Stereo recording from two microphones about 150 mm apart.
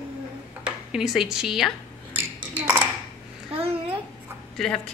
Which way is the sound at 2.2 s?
10° right (ahead or behind).